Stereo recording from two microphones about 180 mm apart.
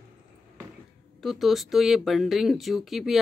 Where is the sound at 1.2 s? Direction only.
Centre (ahead or behind).